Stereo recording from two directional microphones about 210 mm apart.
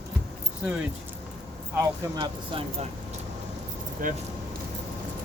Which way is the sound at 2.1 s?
25° right (ahead or behind).